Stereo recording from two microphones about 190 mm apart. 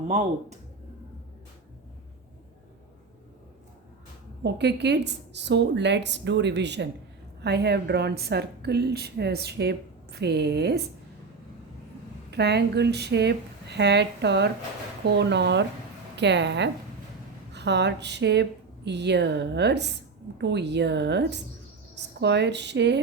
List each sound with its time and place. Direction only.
4.4 s speech: 65° right (ahead or behind)
12.3 s speech: 60° right (ahead or behind)